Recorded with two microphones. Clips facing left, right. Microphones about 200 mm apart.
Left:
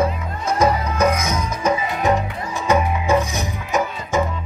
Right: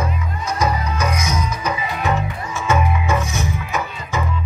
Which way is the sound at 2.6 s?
35° left (ahead or behind).